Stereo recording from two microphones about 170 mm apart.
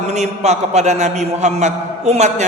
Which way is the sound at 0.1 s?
40° right (ahead or behind).